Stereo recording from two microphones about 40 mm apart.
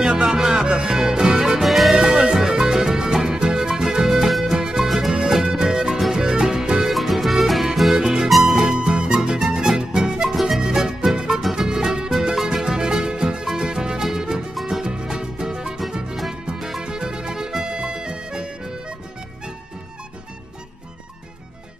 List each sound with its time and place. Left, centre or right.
0.0 s music: centre
1.6 s music: centre
2.0 s music: centre
4.3 s music: centre
4.6 s music: centre
4.8 s music: centre
5.3 s music: centre
6.9 s music: centre
7.9 s music: centre
16.5 s music: centre
16.8 s music: centre